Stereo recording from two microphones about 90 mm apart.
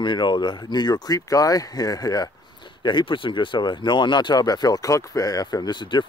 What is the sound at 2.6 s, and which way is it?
Speech, 60° left (ahead or behind).